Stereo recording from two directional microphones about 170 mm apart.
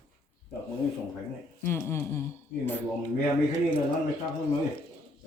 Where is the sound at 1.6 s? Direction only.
15° left (ahead or behind).